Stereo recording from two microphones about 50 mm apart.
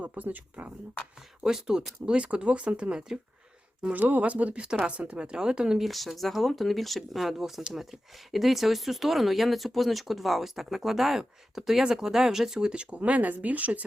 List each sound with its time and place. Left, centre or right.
0.0 s speech: right
1.4 s speech: centre
3.9 s speech: right; by 5.8 s centre
5.8 s speech: centre
13.0 s speech: right